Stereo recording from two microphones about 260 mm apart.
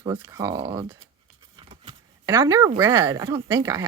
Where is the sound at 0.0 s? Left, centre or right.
Centre.